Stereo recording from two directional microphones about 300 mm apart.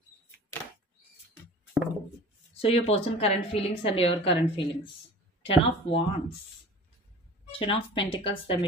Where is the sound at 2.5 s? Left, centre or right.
Centre.